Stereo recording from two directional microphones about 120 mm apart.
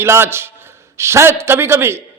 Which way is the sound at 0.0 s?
20° right (ahead or behind).